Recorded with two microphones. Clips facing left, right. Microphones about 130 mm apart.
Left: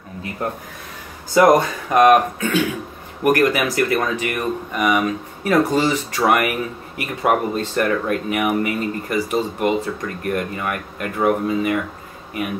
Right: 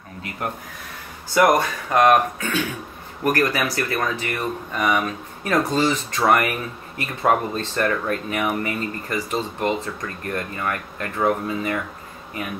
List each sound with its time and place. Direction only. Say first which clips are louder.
1.3 s speech: left 4 dB; 20° left (ahead or behind)